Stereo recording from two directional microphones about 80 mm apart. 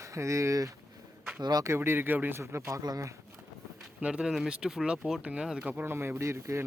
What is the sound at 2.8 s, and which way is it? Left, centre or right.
Speech, right.